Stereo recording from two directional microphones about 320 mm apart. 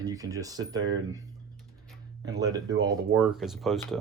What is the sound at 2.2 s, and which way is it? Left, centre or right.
Speech, centre.